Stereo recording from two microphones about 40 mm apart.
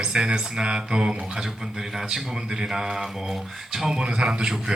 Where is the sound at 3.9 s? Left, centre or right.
Right.